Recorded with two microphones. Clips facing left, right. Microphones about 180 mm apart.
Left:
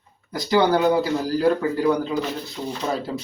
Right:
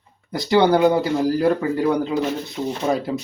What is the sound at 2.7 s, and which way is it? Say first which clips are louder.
Speech: right 4 dB; 15° right (ahead or behind).